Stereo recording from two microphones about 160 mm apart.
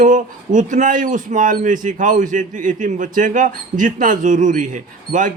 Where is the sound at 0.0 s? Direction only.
50° right (ahead or behind).